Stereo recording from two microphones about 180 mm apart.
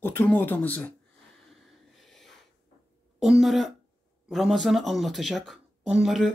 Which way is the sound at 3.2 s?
Centre (ahead or behind).